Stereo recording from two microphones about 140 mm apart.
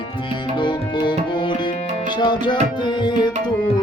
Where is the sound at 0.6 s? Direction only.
35° left (ahead or behind).